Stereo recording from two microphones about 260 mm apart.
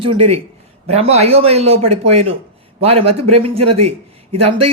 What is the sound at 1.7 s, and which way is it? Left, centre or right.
Speech, right.